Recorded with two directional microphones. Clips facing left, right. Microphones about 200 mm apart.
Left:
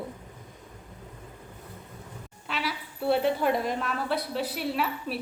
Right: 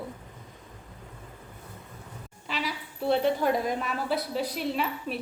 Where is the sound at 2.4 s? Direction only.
Centre (ahead or behind).